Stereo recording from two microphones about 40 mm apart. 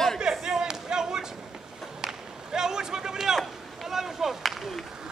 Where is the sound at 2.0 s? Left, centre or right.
Centre.